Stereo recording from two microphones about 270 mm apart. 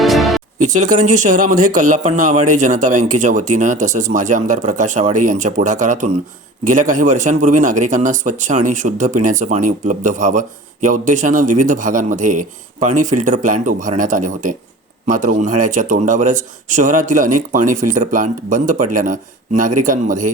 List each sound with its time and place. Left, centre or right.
0.0 s music: centre
1.1 s a man's voice: right